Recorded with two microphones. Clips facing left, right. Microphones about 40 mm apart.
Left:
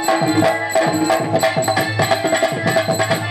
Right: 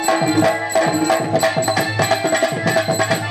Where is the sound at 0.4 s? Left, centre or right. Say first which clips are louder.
Even; centre.